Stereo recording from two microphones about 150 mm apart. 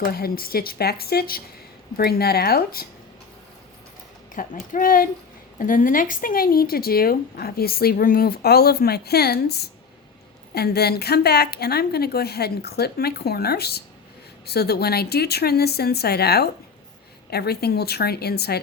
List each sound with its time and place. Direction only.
0.1 s speech: 85° left
4.5 s speech: 65° left (ahead or behind); by 18.6 s 90° left